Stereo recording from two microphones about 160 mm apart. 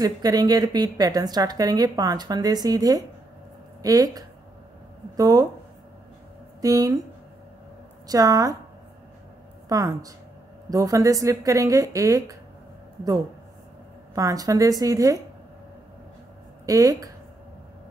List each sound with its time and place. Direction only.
0.0 s a woman's voice: 25° right (ahead or behind)
6.6 s a woman's voice: 20° right (ahead or behind)
8.1 s a woman's voice: 20° right (ahead or behind)
9.7 s a woman's voice: 20° right (ahead or behind)
14.1 s a woman's voice: 20° right (ahead or behind)
16.6 s a woman's voice: 20° right (ahead or behind)